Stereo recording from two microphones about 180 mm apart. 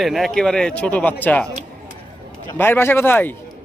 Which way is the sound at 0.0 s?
Centre (ahead or behind).